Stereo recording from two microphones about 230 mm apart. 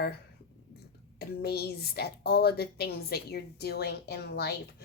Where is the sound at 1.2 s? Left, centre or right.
Left.